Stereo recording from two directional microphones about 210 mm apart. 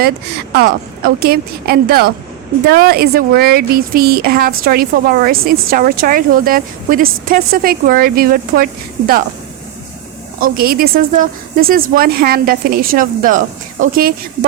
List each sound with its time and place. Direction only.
0.5 s a woman's voice: 45° right (ahead or behind)
10.4 s a woman's voice: 45° right (ahead or behind)